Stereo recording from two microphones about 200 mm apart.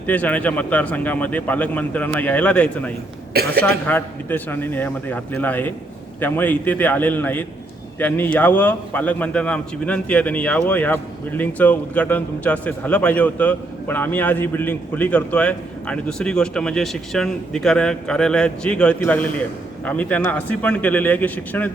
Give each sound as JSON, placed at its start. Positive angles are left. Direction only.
{"t": 0.1, "sound": "a man's voice", "side_deg": 10}
{"t": 3.3, "sound": "a woman's voice", "side_deg": -50}
{"t": 3.8, "sound": "a man's voice", "side_deg": 10}